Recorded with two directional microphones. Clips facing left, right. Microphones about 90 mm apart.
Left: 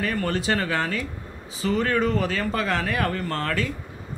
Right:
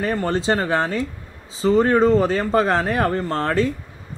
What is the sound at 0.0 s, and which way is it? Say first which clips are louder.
A man's voice: right 4 dB; 25° right (ahead or behind).